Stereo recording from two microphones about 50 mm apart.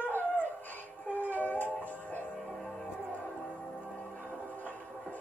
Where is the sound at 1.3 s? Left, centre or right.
Left.